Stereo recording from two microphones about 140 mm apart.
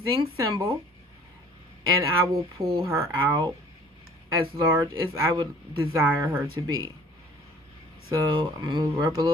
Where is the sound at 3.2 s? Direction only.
35° right (ahead or behind).